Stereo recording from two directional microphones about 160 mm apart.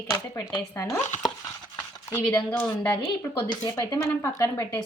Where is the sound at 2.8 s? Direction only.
25° left (ahead or behind).